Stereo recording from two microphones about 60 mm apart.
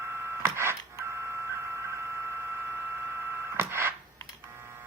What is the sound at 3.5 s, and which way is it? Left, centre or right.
Telephone dialing, right.